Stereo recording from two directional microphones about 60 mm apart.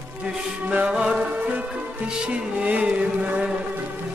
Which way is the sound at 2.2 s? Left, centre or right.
Right.